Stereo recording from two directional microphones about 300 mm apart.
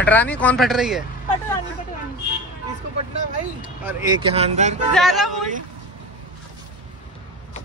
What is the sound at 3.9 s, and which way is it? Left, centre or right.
Speech, centre.